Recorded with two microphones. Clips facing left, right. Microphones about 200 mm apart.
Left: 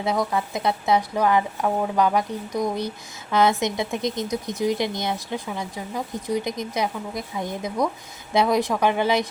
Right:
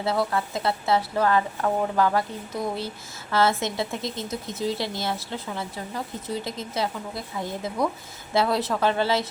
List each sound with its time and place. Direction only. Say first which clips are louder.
0.0 s a woman's voice: left 1 dB; 15° left (ahead or behind)